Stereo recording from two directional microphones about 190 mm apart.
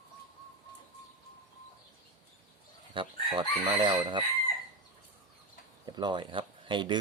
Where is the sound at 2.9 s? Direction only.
25° right (ahead or behind).